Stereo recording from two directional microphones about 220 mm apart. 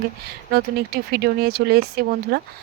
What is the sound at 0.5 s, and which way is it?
Speech, 45° right (ahead or behind).